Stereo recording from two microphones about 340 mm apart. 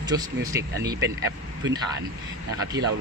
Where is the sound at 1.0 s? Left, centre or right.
Right.